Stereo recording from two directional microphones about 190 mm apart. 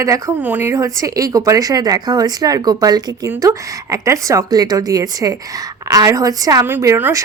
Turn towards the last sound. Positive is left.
turn(degrees=-15)  # may be behind; listen again after turning